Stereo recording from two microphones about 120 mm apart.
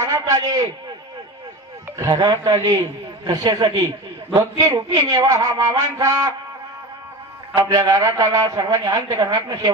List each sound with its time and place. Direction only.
0.0 s a man's voice: 30° right (ahead or behind)
2.0 s a man's voice: 30° right (ahead or behind)
7.5 s a man's voice: 30° right (ahead or behind)